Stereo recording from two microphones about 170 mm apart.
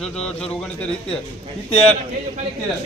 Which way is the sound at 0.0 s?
5° left (ahead or behind).